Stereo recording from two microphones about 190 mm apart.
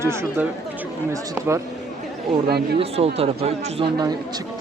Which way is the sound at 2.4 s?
55° right (ahead or behind).